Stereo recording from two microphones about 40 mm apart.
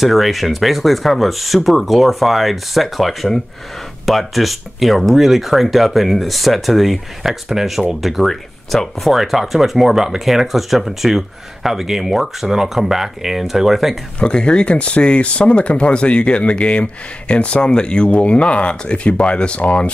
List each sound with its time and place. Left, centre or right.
0.0 s speech: centre
14.2 s speech: left